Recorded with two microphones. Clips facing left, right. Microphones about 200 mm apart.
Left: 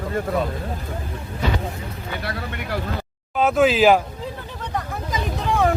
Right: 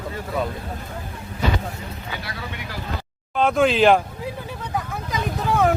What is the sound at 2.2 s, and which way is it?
Speech, 60° left (ahead or behind).